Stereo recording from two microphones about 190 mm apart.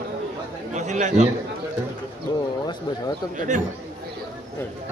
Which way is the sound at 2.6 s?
20° left (ahead or behind).